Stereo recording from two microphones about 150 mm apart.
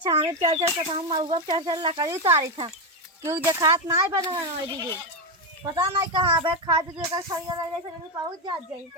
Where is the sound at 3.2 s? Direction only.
15° right (ahead or behind).